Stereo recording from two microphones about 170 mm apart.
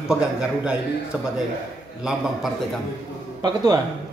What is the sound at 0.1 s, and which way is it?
Speech, 5° right (ahead or behind).